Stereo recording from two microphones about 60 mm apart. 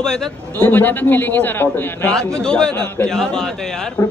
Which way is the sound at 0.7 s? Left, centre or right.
Left.